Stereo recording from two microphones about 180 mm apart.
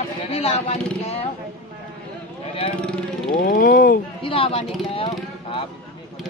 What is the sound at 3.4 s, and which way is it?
Speech, 50° left (ahead or behind).